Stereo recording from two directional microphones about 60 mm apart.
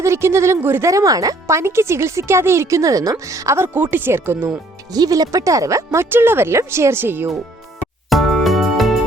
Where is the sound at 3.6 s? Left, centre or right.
Right.